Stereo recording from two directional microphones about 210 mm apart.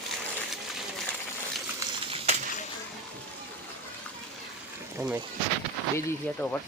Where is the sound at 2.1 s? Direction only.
35° right (ahead or behind).